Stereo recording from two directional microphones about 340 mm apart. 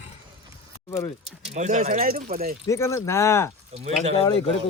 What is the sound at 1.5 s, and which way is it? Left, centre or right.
Speech, right.